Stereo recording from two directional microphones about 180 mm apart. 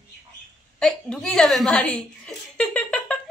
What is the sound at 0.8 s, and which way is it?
Chuckle, 5° left (ahead or behind).